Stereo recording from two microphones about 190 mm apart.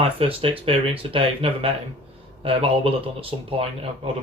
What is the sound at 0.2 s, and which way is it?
Speech, 30° right (ahead or behind).